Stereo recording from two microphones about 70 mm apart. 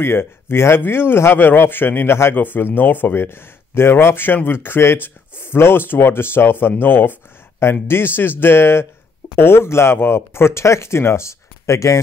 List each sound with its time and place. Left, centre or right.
0.0 s a man's voice: left